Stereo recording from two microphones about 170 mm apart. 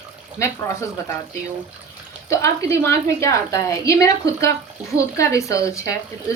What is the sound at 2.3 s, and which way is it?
A woman's voice, 20° left (ahead or behind).